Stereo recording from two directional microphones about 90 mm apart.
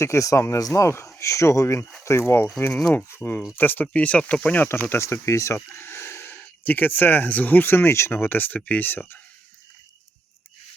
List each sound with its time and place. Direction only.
0.0 s speech: 35° left (ahead or behind); by 4.8 s 20° left (ahead or behind)
4.9 s speech: 30° left (ahead or behind)